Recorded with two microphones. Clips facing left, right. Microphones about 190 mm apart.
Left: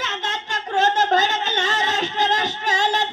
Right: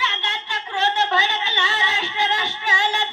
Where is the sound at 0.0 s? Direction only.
45° left (ahead or behind).